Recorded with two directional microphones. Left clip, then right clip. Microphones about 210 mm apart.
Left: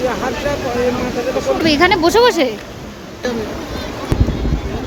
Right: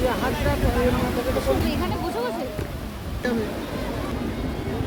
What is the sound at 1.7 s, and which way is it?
Speech, 40° left (ahead or behind).